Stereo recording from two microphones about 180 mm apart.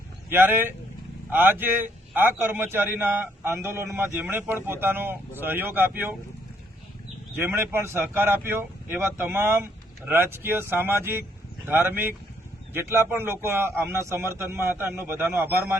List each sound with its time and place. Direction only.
0.3 s a man's voice: 10° right (ahead or behind)
7.3 s a man's voice: 15° right (ahead or behind)